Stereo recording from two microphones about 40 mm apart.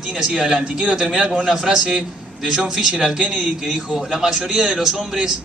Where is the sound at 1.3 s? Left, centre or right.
Centre.